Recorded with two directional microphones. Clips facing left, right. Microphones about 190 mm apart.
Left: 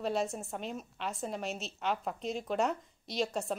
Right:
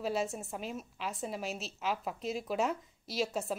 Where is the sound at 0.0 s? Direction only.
Centre (ahead or behind).